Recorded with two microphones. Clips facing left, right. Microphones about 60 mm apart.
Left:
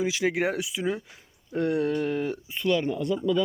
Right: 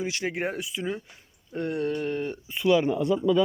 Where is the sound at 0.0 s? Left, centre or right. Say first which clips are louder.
Left 4 dB; left.